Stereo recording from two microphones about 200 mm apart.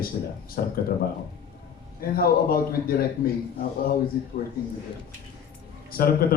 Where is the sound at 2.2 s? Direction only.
50° left (ahead or behind).